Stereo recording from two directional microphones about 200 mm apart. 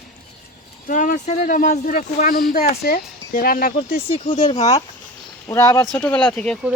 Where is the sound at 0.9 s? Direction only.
40° left (ahead or behind).